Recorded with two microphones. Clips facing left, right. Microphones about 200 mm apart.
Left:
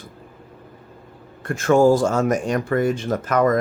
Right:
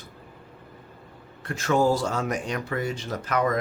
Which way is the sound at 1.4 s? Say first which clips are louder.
Left 7 dB; 50° left (ahead or behind).